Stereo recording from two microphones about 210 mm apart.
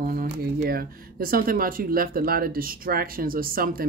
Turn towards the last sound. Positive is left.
turn(degrees=-45)  # may be behind; listen again after turning